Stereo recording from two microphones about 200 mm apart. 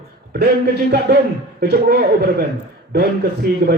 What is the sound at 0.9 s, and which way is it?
Speech, 55° right (ahead or behind).